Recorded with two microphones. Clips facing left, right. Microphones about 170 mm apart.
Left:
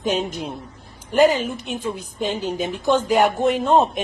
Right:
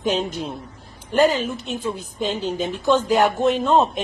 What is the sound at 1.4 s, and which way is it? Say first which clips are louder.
Speech: even; 50° left (ahead or behind).